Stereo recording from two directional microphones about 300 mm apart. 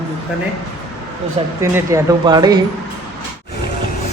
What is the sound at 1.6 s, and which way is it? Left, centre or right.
Speech, centre.